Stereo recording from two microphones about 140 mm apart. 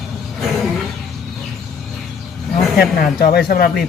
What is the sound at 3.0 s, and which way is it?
Speech, 90° left.